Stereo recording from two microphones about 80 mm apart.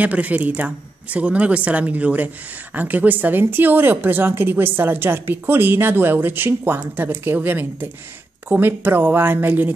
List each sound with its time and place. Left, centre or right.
0.0 s speech: centre